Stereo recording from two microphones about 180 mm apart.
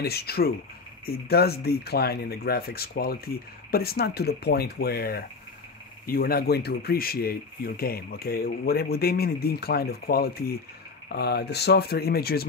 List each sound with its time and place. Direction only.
0.0 s speech: 60° left (ahead or behind)